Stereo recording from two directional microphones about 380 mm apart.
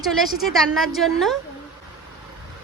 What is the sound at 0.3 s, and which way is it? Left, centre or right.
A woman's voice, centre.